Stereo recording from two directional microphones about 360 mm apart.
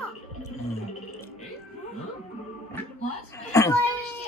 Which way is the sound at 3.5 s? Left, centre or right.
Centre.